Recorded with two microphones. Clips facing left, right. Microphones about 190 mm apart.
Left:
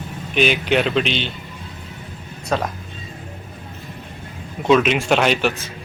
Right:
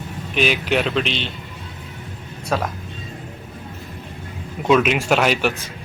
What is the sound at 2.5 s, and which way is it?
Speech, 5° right (ahead or behind).